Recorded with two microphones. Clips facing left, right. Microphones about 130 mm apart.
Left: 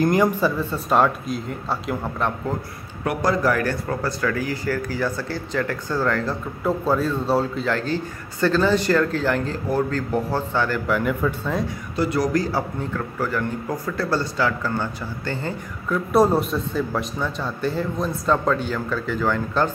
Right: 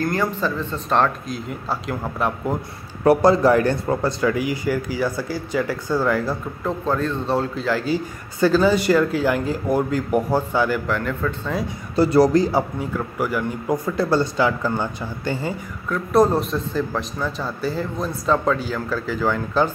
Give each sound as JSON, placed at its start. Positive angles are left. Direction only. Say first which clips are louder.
{"t": 0.0, "sound": "speech", "louder": "left 4 dB", "side_deg": 15}
{"t": 3.0, "sound": "a man's voice", "louder": "right 7 dB", "side_deg": -30}
{"t": 6.6, "sound": "a man's voice", "louder": "left 2 dB", "side_deg": 5}
{"t": 10.9, "sound": "speech", "louder": "left 2 dB", "side_deg": 5}
{"t": 11.9, "sound": "a man's voice", "louder": "right 7 dB", "side_deg": -35}
{"t": 15.9, "sound": "a man's voice", "louder": "right 1 dB", "side_deg": 0}